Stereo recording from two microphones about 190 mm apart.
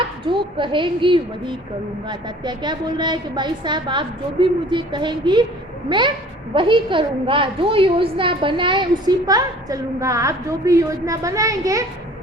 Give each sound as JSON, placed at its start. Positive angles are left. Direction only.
{"t": 0.3, "sound": "a woman's voice", "side_deg": -25}